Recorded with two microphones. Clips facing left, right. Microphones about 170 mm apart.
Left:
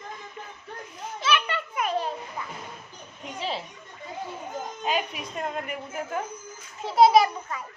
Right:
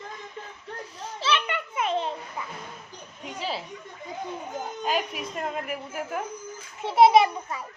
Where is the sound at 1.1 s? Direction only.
30° right (ahead or behind).